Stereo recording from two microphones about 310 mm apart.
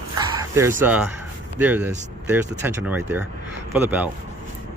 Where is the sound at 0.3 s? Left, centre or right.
Centre.